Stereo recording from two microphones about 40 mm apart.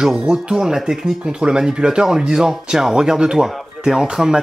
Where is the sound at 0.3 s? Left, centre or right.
Centre.